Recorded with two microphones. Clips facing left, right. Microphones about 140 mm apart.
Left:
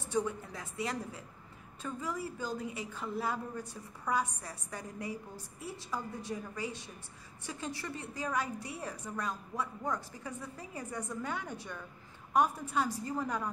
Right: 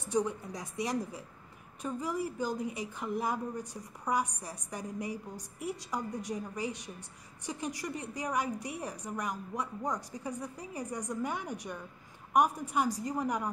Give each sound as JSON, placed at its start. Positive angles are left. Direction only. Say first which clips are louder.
{"t": 0.1, "sound": "a woman's voice", "louder": "right 2 dB", "side_deg": -20}